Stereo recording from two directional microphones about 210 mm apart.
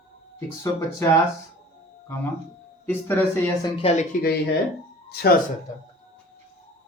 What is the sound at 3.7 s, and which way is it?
Speech, 30° left (ahead or behind).